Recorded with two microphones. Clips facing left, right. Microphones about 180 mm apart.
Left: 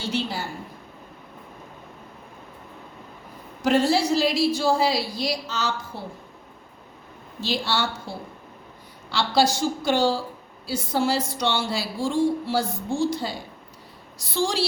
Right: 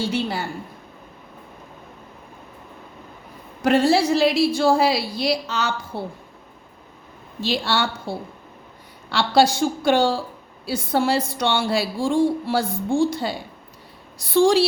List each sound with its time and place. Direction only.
0.1 s a woman's voice: 55° right (ahead or behind)
3.6 s a woman's voice: 60° right (ahead or behind)
7.4 s a woman's voice: 60° right (ahead or behind)